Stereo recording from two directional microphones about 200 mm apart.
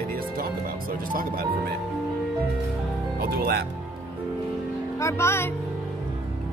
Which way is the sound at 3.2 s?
50° right (ahead or behind).